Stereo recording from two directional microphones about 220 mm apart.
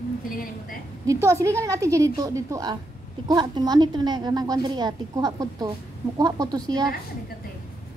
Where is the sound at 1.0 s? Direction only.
15° right (ahead or behind).